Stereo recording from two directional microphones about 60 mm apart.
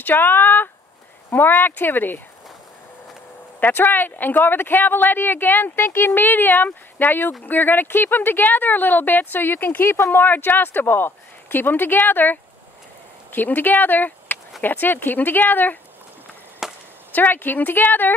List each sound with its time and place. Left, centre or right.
0.0 s speech: left
3.5 s speech: left
10.2 s speech: left
16.6 s chop: centre
17.1 s speech: left